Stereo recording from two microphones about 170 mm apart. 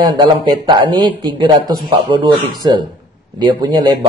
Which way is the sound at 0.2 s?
30° right (ahead or behind).